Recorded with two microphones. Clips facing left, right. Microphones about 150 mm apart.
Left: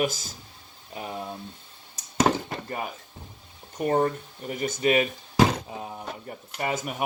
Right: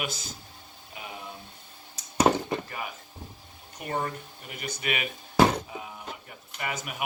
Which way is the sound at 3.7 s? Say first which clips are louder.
Left 8 dB; 40° left (ahead or behind).